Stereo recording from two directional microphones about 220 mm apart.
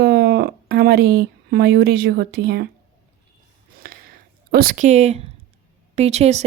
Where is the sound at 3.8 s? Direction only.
40° right (ahead or behind).